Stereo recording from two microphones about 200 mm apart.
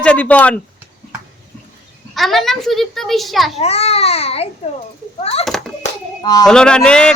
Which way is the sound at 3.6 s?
30° left (ahead or behind).